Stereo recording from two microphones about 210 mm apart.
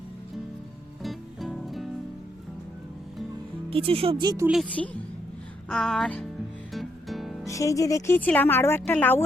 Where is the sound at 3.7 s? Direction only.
25° right (ahead or behind).